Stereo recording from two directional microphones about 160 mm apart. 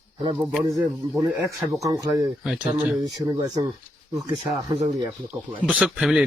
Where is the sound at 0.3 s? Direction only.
5° right (ahead or behind).